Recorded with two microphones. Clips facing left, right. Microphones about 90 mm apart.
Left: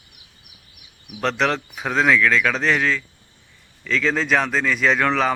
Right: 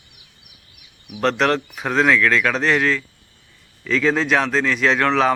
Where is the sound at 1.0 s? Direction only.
Centre (ahead or behind).